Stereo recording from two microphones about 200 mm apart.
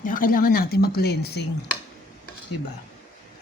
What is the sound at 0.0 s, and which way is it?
Speech, 45° left (ahead or behind).